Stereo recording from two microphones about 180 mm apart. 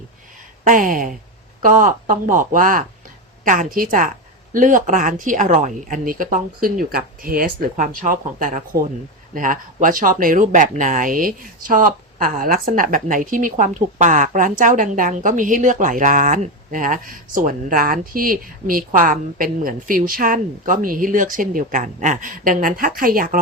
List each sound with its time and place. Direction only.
0.6 s speech: 50° right (ahead or behind)